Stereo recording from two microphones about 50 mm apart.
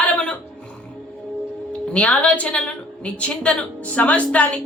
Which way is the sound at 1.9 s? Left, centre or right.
Left.